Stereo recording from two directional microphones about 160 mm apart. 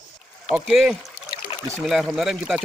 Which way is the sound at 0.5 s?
5° right (ahead or behind).